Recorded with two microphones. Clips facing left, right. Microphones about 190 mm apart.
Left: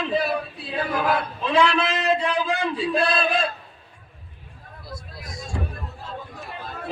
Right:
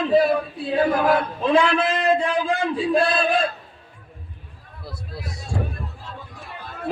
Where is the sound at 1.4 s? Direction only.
50° right (ahead or behind).